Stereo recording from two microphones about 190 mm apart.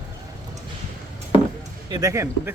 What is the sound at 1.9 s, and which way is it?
Speech, 20° right (ahead or behind).